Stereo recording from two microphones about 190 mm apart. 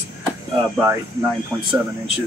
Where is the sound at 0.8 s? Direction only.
10° right (ahead or behind).